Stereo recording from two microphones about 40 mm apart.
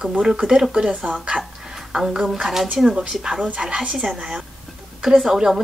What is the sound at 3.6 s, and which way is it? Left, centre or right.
A woman's voice, right.